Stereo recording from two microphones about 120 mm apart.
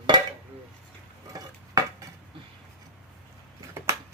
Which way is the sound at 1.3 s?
30° right (ahead or behind).